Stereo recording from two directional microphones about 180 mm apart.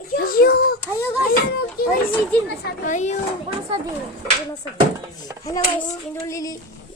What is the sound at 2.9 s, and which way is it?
Speech, 40° left (ahead or behind).